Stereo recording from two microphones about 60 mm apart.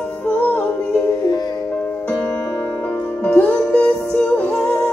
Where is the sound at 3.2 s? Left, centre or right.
Left.